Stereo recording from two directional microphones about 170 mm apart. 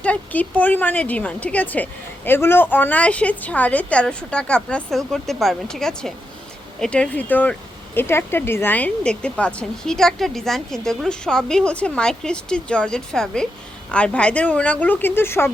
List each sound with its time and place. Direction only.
0.0 s a woman's voice: 10° left (ahead or behind)